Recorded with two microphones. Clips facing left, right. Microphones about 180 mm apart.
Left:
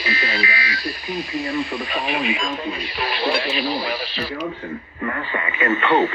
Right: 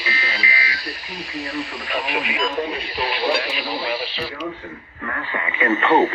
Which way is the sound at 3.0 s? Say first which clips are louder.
Even; 15° right (ahead or behind).